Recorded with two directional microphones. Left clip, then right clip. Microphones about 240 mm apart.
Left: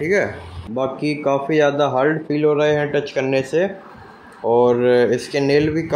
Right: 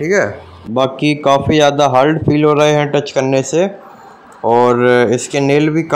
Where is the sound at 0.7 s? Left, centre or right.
Right.